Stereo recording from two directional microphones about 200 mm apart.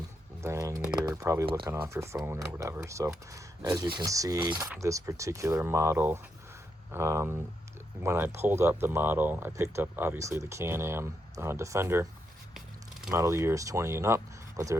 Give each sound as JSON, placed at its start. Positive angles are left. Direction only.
{"t": 0.4, "sound": "speech", "side_deg": -15}
{"t": 13.1, "sound": "speech", "side_deg": -15}